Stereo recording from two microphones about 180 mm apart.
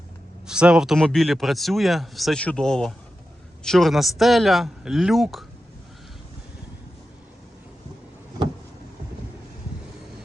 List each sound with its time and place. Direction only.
0.4 s speech: 5° right (ahead or behind)